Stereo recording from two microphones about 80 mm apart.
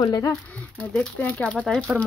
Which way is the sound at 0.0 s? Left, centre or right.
Left.